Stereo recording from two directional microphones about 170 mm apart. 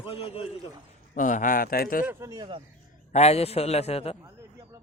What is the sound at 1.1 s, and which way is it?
Speech, 50° left (ahead or behind).